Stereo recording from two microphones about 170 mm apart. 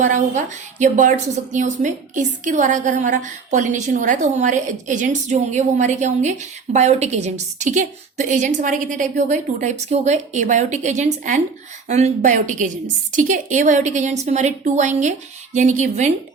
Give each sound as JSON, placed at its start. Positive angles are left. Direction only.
{"t": 0.0, "sound": "a woman's voice", "side_deg": -45}